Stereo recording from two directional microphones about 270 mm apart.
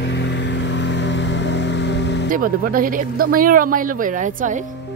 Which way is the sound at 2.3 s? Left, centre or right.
Right.